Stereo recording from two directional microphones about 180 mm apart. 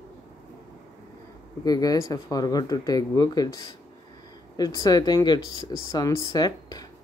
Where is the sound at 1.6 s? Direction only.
20° left (ahead or behind).